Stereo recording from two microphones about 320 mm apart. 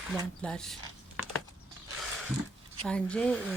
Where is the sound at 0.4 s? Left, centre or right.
Centre.